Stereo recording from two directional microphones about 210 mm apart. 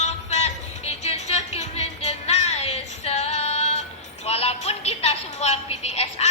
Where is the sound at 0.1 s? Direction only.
30° left (ahead or behind).